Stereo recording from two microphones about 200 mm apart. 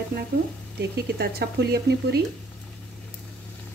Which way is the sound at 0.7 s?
55° right (ahead or behind).